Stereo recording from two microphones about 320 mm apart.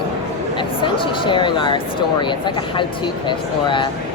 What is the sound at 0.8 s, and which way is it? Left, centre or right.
Speech, centre.